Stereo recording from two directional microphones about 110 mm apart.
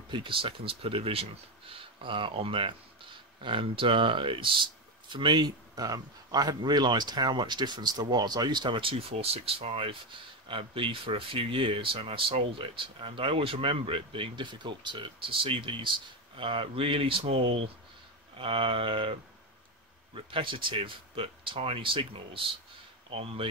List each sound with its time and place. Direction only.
0.1 s a man's voice: 50° right (ahead or behind)
20.2 s speech: 50° right (ahead or behind)